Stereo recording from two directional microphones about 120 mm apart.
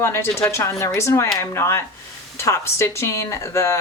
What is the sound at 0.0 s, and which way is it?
Speech, 20° left (ahead or behind).